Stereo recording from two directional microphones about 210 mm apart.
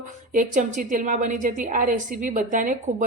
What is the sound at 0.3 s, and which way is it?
A woman's voice, 35° right (ahead or behind).